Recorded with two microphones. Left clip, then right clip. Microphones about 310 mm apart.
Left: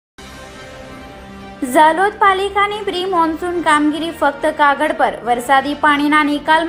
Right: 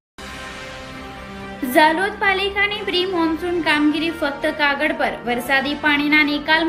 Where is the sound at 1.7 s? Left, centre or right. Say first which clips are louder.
Left 4 dB; centre.